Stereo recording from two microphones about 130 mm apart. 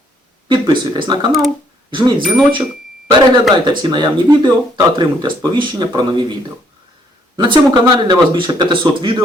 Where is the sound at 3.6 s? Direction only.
35° right (ahead or behind).